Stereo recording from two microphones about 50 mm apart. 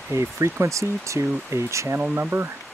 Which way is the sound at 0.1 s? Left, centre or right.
Right.